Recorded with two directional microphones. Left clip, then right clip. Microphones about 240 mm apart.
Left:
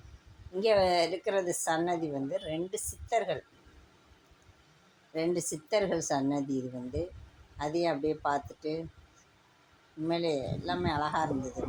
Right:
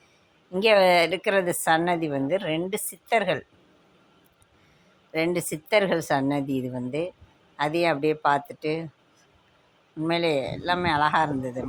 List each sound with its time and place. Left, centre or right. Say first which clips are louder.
0.6 s a woman's voice: right 7 dB; right
5.1 s a woman's voice: right 6 dB; right
7.5 s a woman's voice: right 7 dB; right
10.1 s a woman's voice: right 7 dB; right
11.3 s speech: right 5 dB; centre